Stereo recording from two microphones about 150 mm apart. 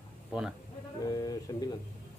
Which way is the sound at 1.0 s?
25° left (ahead or behind).